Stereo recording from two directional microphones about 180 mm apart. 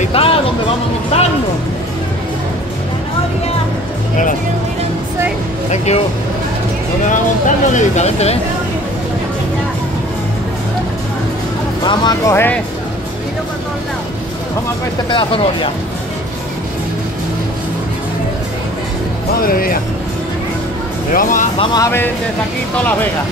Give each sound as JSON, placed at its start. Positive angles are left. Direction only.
{"t": 0.0, "sound": "a sound", "side_deg": 30}
{"t": 5.7, "sound": "speech", "side_deg": 35}
{"t": 7.1, "sound": "speech", "side_deg": 45}
{"t": 11.8, "sound": "speech", "side_deg": 25}
{"t": 15.0, "sound": "speech", "side_deg": 30}
{"t": 19.4, "sound": "speech", "side_deg": 55}
{"t": 21.1, "sound": "speech", "side_deg": 50}
{"t": 21.5, "sound": "speech", "side_deg": 20}